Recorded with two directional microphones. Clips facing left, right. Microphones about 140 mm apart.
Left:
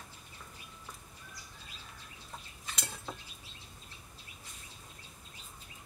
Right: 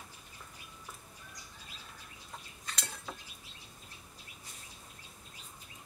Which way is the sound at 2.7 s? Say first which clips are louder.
Left 1 dB; 5° left (ahead or behind).